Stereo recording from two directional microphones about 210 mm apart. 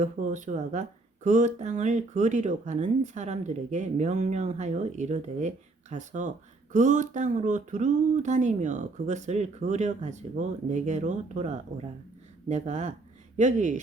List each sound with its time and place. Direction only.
0.0 s speech: 35° right (ahead or behind)